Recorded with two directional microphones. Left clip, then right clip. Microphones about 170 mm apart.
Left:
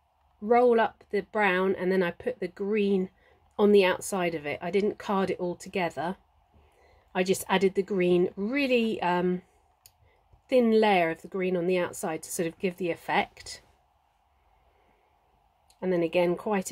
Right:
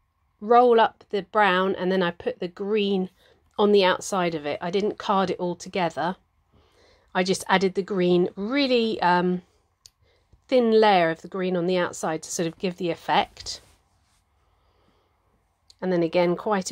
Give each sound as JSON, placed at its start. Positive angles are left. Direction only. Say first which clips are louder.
{"t": 0.5, "sound": "a woman's voice", "louder": "right 5 dB", "side_deg": -25}
{"t": 10.5, "sound": "a woman's voice", "louder": "right 4 dB", "side_deg": -25}
{"t": 15.8, "sound": "a woman's voice", "louder": "right 3 dB", "side_deg": -30}